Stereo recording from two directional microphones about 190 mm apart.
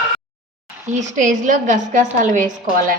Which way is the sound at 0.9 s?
40° right (ahead or behind).